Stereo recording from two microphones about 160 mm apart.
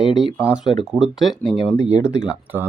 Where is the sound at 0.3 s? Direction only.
20° left (ahead or behind).